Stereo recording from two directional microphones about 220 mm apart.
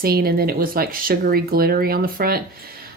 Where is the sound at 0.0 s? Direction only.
45° right (ahead or behind).